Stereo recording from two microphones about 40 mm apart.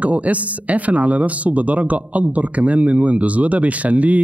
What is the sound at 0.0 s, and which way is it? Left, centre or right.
Speech, right.